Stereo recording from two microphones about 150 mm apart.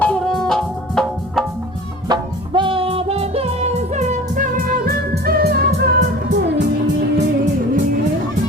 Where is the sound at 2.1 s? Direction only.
35° right (ahead or behind); by 5.6 s 90° right.